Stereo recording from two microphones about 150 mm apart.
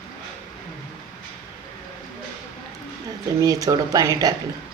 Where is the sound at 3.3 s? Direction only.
25° right (ahead or behind).